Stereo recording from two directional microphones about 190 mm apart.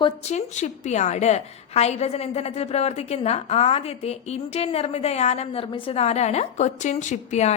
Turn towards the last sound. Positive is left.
turn(degrees=35)  # may be behind; listen again after turning